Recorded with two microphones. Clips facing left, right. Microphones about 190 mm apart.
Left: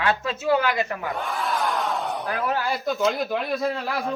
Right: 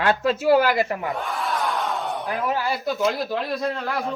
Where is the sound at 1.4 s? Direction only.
Centre (ahead or behind).